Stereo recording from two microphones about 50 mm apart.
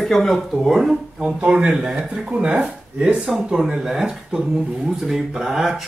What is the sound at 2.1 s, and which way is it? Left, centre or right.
Speech, right.